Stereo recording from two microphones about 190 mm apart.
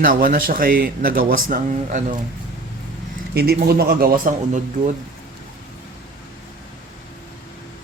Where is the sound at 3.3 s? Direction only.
55° right (ahead or behind).